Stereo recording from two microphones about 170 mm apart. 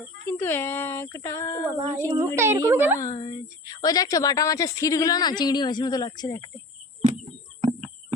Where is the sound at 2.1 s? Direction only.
15° right (ahead or behind).